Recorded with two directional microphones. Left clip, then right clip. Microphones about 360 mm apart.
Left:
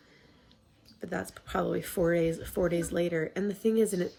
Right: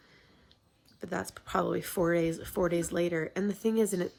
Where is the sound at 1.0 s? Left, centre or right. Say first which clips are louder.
Even; centre.